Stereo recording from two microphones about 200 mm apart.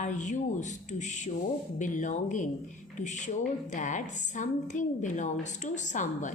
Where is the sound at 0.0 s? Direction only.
40° left (ahead or behind).